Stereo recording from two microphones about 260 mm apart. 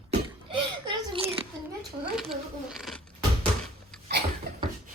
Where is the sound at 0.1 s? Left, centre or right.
Centre.